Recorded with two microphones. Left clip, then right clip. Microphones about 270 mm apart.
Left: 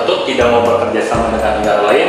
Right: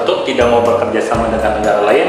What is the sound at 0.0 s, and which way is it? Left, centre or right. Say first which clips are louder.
Music: even; centre.